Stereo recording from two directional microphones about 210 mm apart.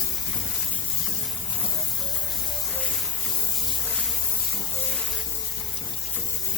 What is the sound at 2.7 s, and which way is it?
Spray, 5° left (ahead or behind).